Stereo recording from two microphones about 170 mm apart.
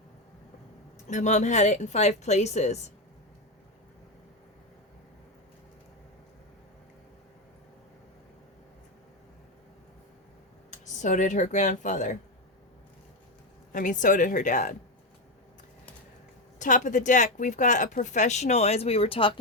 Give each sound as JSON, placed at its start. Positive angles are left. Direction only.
{"t": 1.0, "sound": "speech", "side_deg": 45}
{"t": 10.7, "sound": "speech", "side_deg": 45}
{"t": 13.7, "sound": "speech", "side_deg": 50}
{"t": 16.6, "sound": "speech", "side_deg": 45}